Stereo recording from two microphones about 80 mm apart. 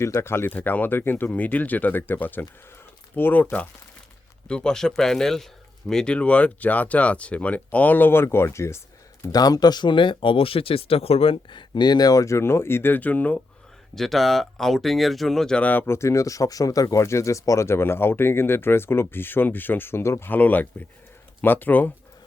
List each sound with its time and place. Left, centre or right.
0.0 s speech: left
9.3 s speech: left
11.4 s speech: left; by 13.4 s centre
13.9 s speech: centre
15.6 s speech: left
15.9 s speech: left